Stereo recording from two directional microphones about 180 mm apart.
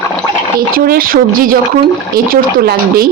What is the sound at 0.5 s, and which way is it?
Speech, 55° right (ahead or behind).